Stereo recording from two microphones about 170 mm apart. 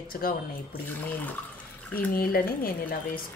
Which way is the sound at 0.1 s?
60° left (ahead or behind).